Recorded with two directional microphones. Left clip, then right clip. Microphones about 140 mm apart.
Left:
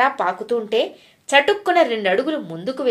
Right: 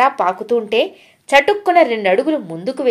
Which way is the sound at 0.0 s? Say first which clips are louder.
Right 4 dB; 40° right (ahead or behind).